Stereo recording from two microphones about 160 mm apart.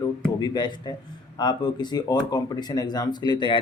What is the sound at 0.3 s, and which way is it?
Speech, 25° left (ahead or behind).